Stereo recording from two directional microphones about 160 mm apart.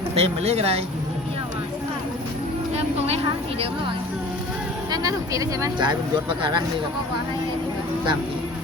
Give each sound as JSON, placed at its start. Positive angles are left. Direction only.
{"t": 0.1, "sound": "speech", "side_deg": -40}
{"t": 4.9, "sound": "speech", "side_deg": -20}